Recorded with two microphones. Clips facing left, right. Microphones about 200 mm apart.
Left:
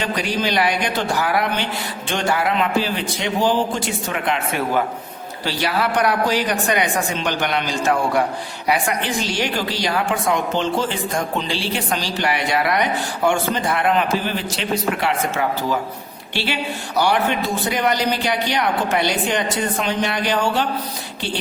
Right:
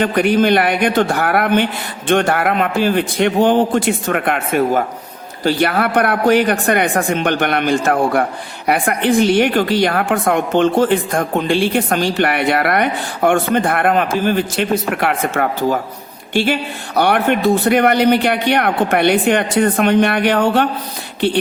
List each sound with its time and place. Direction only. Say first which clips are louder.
0.0 s a woman's voice: right 9 dB; 55° right (ahead or behind)